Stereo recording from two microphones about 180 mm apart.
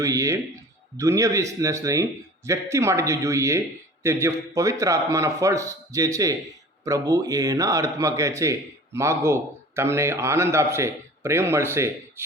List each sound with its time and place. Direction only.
0.0 s speech: 15° right (ahead or behind)